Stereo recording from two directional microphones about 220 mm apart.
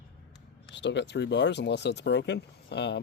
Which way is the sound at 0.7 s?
55° left (ahead or behind).